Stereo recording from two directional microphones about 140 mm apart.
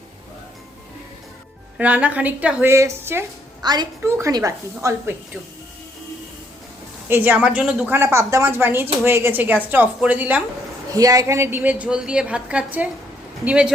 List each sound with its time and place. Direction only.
1.8 s a woman's voice: 10° right (ahead or behind)
3.6 s a woman's voice: 30° right (ahead or behind)
7.1 s a woman's voice: 15° right (ahead or behind)
10.9 s a woman's voice: 25° right (ahead or behind); by 13.7 s 10° right (ahead or behind)